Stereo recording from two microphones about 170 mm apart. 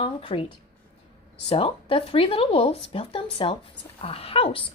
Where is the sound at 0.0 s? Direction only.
30° left (ahead or behind).